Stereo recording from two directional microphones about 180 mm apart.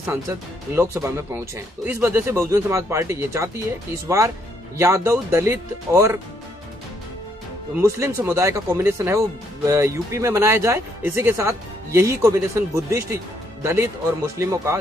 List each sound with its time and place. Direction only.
0.0 s speech: 15° right (ahead or behind)
4.7 s speech: 15° right (ahead or behind)
7.9 s speech: 15° right (ahead or behind)